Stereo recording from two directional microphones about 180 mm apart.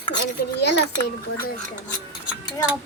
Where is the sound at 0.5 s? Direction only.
70° left (ahead or behind).